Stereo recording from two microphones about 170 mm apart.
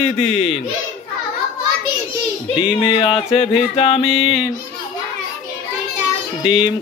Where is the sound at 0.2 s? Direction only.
40° left (ahead or behind).